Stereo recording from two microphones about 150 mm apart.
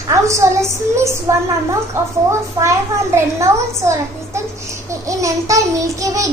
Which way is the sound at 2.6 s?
25° right (ahead or behind).